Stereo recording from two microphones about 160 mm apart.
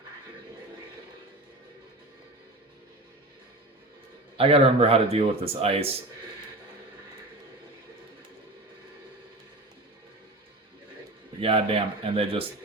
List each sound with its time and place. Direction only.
4.4 s a man's voice: 35° right (ahead or behind)
11.3 s a man's voice: 35° right (ahead or behind)